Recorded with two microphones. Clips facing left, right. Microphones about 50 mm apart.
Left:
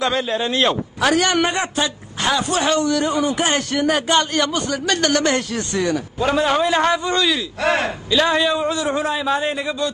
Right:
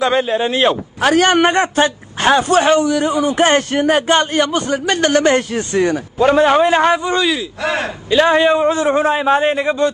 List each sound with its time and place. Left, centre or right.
0.1 s speech: right
1.0 s a man's voice: right
2.8 s speech: centre
3.3 s a man's voice: right; by 7.3 s centre
7.8 s a man's voice: right